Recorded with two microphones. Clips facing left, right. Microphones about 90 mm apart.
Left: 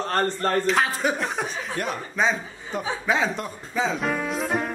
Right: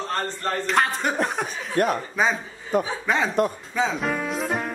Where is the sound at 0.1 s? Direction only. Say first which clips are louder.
Left 4 dB; 45° left (ahead or behind).